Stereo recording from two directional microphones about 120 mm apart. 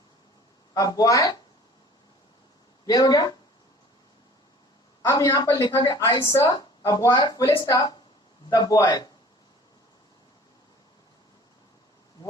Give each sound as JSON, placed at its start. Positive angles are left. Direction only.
{"t": 0.7, "sound": "a woman's voice", "side_deg": 30}
{"t": 2.8, "sound": "a woman's voice", "side_deg": 35}
{"t": 5.0, "sound": "a woman's voice", "side_deg": 30}